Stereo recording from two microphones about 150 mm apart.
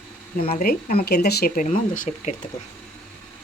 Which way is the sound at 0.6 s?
85° left.